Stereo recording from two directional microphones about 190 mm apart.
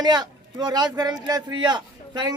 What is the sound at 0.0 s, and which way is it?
A man's voice, 20° right (ahead or behind).